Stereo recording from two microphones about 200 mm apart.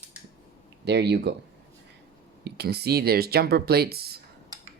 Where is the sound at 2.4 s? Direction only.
50° right (ahead or behind).